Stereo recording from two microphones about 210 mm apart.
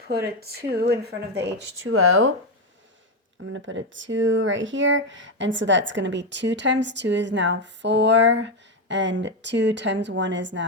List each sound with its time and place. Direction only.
0.3 s speech: 50° right (ahead or behind)
1.8 s speech: 90° right
3.5 s speech: 65° right (ahead or behind)